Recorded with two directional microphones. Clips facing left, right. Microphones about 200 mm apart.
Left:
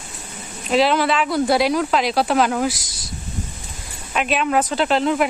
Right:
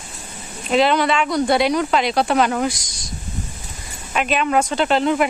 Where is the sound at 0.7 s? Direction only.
Centre (ahead or behind).